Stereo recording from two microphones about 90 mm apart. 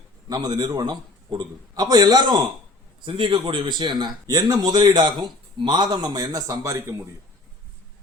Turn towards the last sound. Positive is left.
turn(degrees=-40)  # may be behind; listen again after turning